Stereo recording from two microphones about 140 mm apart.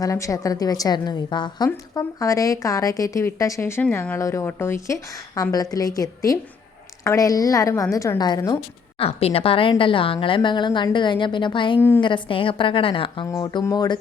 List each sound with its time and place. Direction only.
0.0 s a woman's voice: 25° left (ahead or behind)
9.0 s a woman's voice: 45° left (ahead or behind)
13.2 s a woman's voice: 25° left (ahead or behind)